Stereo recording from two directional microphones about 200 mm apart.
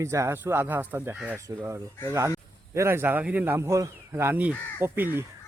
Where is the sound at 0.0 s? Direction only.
15° right (ahead or behind).